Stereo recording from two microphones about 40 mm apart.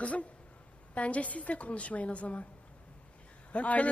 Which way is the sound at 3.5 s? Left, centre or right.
Left.